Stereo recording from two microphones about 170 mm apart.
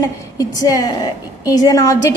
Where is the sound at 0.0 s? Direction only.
20° left (ahead or behind).